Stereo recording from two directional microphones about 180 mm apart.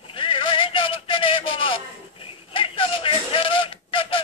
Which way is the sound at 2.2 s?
30° left (ahead or behind).